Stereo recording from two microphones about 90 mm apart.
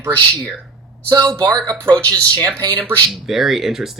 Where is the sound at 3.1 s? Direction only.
5° right (ahead or behind).